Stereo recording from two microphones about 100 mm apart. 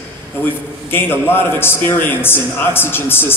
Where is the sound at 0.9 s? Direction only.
20° left (ahead or behind).